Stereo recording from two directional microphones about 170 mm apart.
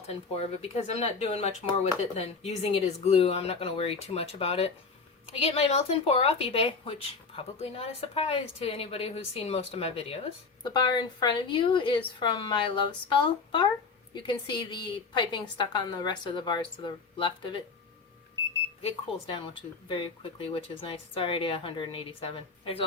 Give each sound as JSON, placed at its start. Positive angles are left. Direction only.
{"t": 0.1, "sound": "a woman's voice", "side_deg": 35}
{"t": 18.8, "sound": "a woman's voice", "side_deg": 30}